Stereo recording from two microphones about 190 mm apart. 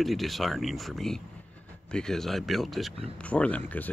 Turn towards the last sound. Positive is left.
turn(degrees=10)  # may be behind; listen again after turning